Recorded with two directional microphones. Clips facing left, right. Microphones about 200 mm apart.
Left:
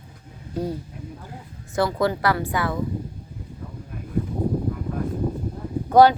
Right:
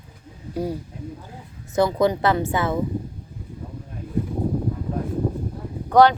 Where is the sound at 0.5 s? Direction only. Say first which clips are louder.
Right 1 dB; 10° right (ahead or behind).